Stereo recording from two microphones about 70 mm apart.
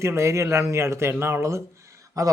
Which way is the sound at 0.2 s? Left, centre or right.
Right.